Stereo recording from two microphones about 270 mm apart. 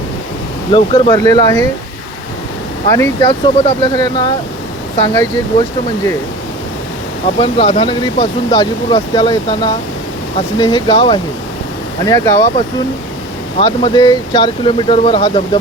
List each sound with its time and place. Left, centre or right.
0.7 s speech: centre
2.9 s speech: centre
7.3 s speech: centre
13.6 s speech: centre